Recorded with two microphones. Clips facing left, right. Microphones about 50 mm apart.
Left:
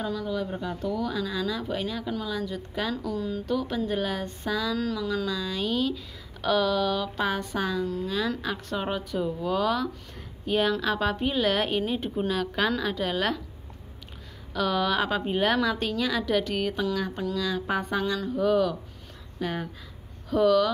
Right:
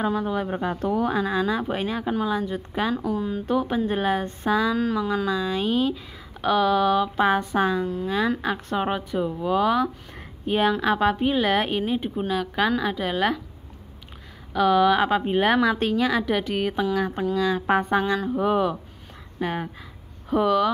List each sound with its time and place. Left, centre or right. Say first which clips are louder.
0.0 s a woman's voice: right 5 dB; right; by 13.4 s centre
14.5 s speech: right 7 dB; centre